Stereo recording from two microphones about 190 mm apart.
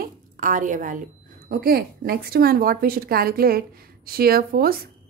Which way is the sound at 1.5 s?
50° right (ahead or behind).